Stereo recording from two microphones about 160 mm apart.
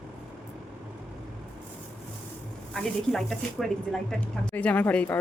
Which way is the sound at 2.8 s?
Centre (ahead or behind).